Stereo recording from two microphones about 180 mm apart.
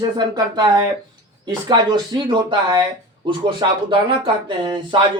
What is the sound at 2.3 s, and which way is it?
Speech, 25° right (ahead or behind).